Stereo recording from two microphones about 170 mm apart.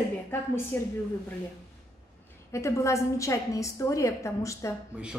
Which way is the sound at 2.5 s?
15° left (ahead or behind).